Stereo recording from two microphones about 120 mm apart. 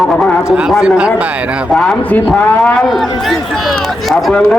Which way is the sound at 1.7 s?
5° left (ahead or behind).